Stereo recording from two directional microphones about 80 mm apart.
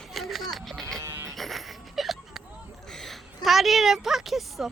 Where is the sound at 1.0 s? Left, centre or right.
Right.